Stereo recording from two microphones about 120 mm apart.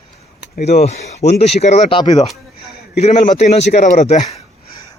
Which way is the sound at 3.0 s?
65° left (ahead or behind).